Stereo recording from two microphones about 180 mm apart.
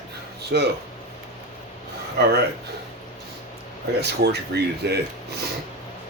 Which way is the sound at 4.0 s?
65° right (ahead or behind).